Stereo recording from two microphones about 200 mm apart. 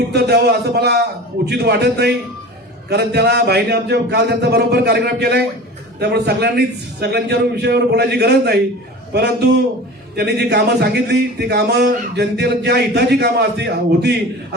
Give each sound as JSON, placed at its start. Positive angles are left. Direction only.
{"t": 0.1, "sound": "speech", "side_deg": -55}